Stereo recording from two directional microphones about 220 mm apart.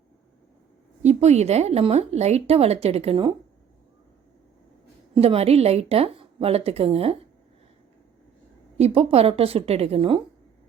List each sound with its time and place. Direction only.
1.0 s speech: 30° right (ahead or behind)
5.1 s speech: 25° right (ahead or behind)
8.8 s speech: 25° right (ahead or behind)